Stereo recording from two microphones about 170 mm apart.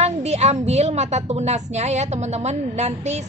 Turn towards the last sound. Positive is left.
turn(degrees=-40)  # may be behind; listen again after turning